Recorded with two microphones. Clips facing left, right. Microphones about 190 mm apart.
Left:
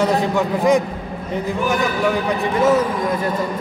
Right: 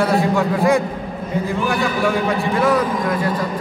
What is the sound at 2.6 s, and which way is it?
Speech, 25° left (ahead or behind).